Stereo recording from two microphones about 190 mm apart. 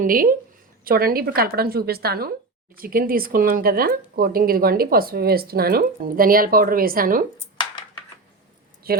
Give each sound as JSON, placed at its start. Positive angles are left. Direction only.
{"t": 0.0, "sound": "speech", "side_deg": -50}
{"t": 8.9, "sound": "speech", "side_deg": -55}